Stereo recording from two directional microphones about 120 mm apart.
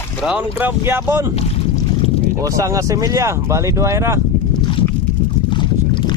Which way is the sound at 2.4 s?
25° right (ahead or behind).